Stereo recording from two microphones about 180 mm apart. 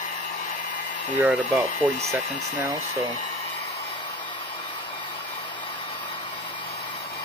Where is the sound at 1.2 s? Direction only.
Centre (ahead or behind).